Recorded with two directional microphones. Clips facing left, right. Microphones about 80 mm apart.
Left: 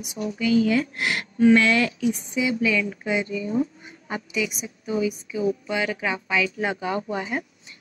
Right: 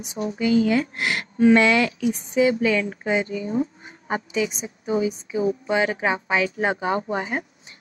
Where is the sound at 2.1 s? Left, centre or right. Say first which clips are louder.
Right 5 dB; right.